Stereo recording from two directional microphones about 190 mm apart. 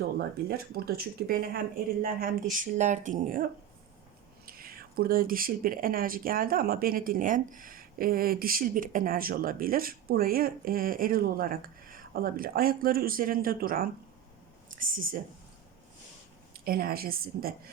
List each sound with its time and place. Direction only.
0.2 s speech: 55° right (ahead or behind)
4.4 s speech: 50° right (ahead or behind)
16.6 s speech: 50° right (ahead or behind)